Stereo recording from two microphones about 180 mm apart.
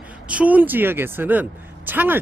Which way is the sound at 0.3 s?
10° right (ahead or behind).